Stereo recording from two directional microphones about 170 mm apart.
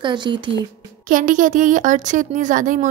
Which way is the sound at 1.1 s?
50° right (ahead or behind).